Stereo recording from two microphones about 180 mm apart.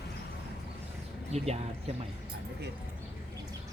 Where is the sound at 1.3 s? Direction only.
35° right (ahead or behind).